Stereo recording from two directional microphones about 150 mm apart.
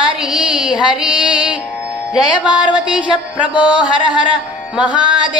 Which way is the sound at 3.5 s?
30° left (ahead or behind).